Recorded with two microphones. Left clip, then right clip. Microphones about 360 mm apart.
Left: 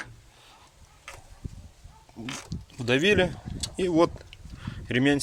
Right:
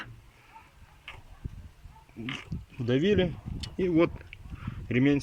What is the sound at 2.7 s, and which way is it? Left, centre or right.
Speech, left.